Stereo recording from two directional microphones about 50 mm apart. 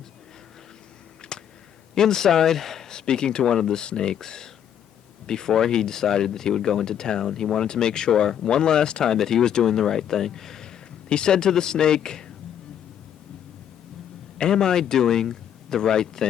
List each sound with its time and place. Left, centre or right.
1.2 s a sound: centre
2.0 s speech: centre
14.3 s speech: centre